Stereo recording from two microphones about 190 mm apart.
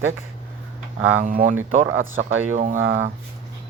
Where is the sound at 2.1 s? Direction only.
90° right.